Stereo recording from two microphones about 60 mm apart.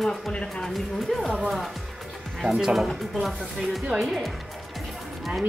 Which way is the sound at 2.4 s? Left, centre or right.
Centre.